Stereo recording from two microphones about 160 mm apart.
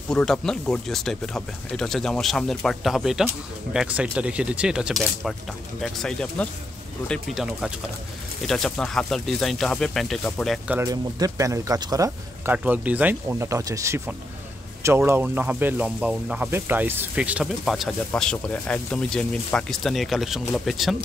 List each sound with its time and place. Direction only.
0.1 s speech: 5° left (ahead or behind)
10.9 s speech: 20° right (ahead or behind)
12.5 s speech: 10° right (ahead or behind)